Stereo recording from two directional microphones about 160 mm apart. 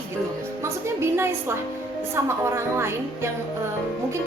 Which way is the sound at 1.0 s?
15° right (ahead or behind).